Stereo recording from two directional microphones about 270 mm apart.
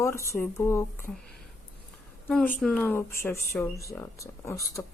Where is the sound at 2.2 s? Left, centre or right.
Centre.